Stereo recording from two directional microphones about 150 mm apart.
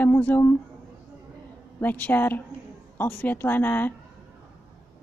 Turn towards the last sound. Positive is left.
turn(degrees=15)  # may be behind; listen again after turning